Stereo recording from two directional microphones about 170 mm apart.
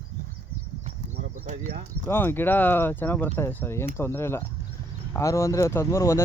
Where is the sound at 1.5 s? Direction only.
45° right (ahead or behind).